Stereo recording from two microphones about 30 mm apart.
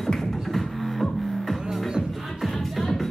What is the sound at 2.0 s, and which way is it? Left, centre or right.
Music, centre.